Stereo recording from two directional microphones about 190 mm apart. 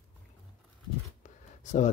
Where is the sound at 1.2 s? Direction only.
40° left (ahead or behind).